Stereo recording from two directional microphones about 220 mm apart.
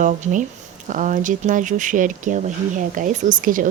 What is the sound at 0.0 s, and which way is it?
Speech, 35° right (ahead or behind).